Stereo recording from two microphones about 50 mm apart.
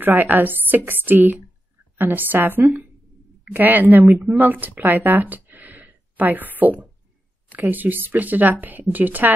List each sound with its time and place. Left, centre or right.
0.0 s speech: right